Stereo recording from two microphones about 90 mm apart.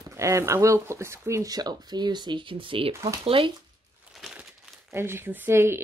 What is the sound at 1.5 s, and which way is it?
Speech, 50° right (ahead or behind).